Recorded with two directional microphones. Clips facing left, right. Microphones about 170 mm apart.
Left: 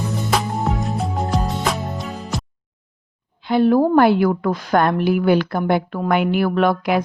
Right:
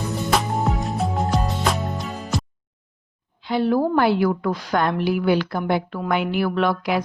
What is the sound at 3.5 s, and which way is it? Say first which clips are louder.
A woman's voice: left 5 dB; 50° left (ahead or behind).